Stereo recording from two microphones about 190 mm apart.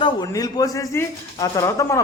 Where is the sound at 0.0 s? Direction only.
20° left (ahead or behind).